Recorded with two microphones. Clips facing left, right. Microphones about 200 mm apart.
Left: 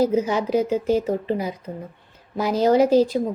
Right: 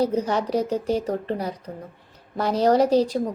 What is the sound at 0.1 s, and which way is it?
Speech, 5° left (ahead or behind).